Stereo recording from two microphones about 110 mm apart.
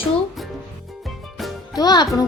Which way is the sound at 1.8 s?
40° left (ahead or behind).